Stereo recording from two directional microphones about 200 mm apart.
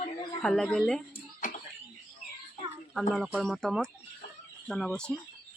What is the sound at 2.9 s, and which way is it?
Speech, centre (ahead or behind).